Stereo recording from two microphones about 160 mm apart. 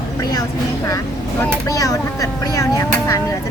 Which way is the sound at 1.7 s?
20° left (ahead or behind).